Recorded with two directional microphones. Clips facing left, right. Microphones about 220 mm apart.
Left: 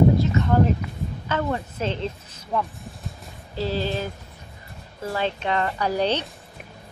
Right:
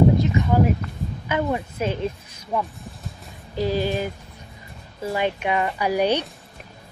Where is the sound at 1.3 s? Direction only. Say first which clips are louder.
Right 2 dB; 10° right (ahead or behind).